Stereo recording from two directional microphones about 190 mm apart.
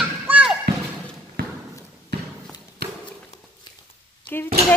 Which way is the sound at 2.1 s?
60° right (ahead or behind).